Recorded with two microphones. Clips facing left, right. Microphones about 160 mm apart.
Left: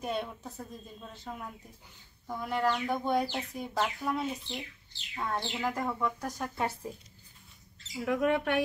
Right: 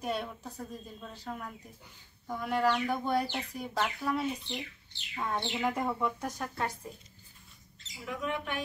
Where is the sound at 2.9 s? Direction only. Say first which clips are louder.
Left 1 dB; 10° left (ahead or behind).